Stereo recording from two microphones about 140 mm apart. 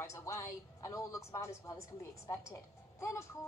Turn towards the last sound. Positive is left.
turn(degrees=20)  # may be behind; listen again after turning